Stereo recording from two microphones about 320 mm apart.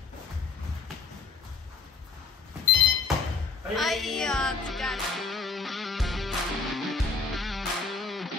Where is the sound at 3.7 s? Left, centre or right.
Centre.